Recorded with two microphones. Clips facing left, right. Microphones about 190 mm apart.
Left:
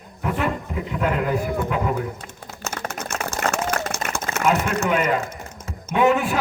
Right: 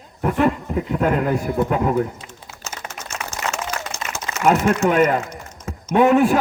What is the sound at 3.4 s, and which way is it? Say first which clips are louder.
Run: left 3 dB; 55° left (ahead or behind).